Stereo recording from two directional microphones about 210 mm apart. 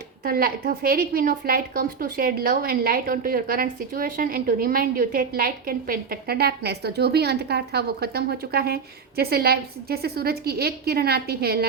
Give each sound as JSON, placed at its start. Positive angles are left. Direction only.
{"t": 0.3, "sound": "a woman's voice", "side_deg": -45}